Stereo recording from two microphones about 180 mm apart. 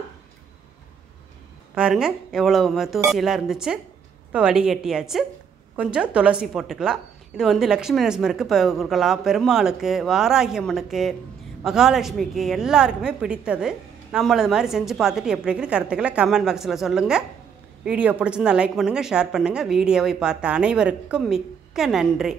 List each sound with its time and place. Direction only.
1.8 s a woman's voice: 5° right (ahead or behind)